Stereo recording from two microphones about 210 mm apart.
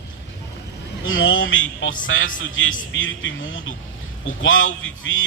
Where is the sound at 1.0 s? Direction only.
70° left (ahead or behind).